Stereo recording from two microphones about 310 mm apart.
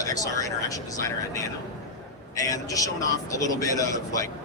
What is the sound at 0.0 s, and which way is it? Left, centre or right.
Speech, centre.